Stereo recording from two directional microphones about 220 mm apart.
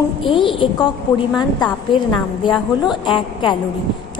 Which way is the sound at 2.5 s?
Centre (ahead or behind).